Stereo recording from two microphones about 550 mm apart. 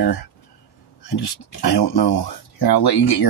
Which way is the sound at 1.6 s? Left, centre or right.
Left.